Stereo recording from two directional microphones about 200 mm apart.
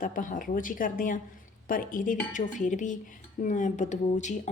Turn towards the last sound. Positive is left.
turn(degrees=35)  # may be behind; listen again after turning